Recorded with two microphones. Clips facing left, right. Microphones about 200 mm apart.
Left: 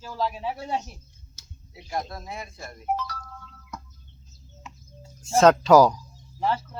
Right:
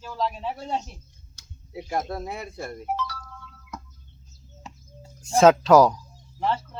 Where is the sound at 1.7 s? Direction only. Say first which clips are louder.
Right 4 dB; 55° right (ahead or behind).